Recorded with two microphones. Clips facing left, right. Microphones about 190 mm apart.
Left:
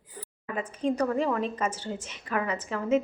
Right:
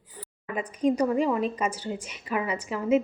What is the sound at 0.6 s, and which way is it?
A woman's voice, 15° right (ahead or behind).